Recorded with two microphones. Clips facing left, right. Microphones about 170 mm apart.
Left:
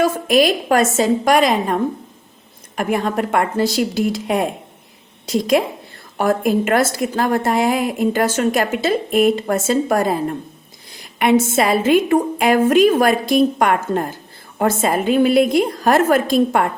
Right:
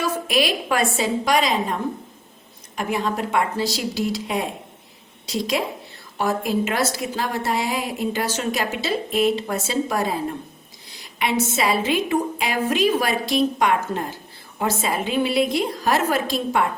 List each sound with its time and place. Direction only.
0.0 s a woman's voice: 45° left (ahead or behind)